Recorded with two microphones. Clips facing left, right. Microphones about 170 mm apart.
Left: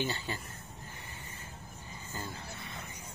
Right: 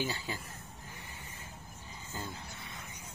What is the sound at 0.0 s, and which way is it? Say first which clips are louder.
Speech: left 1 dB; 10° right (ahead or behind).